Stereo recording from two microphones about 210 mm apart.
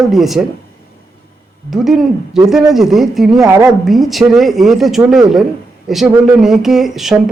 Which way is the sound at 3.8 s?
Centre (ahead or behind).